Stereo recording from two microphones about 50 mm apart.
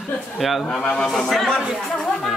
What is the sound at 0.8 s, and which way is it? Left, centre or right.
Speech, centre.